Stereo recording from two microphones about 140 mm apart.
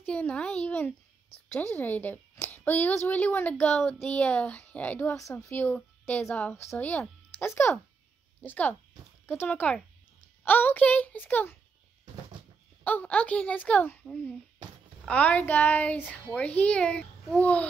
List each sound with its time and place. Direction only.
0.0 s a child's voice: 10° left (ahead or behind)
12.8 s a woman's voice: 10° left (ahead or behind)